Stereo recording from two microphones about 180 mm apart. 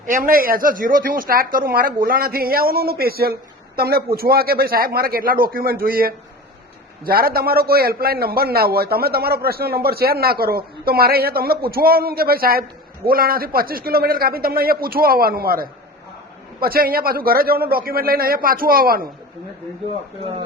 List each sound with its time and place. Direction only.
0.0 s a man's voice: 50° right (ahead or behind)